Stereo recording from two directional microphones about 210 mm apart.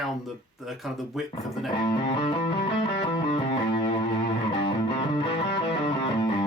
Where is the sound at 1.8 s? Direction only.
20° left (ahead or behind).